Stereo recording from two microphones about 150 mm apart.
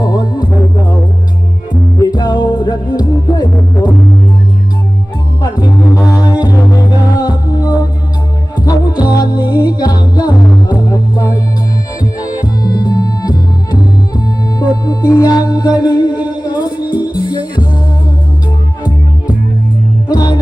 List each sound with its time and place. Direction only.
0.0 s music: 25° left (ahead or behind)
2.0 s music: 25° left (ahead or behind)
5.4 s music: 25° left (ahead or behind)
8.9 s music: 10° right (ahead or behind)
9.1 s music: 25° left (ahead or behind)
20.1 s music: 30° left (ahead or behind)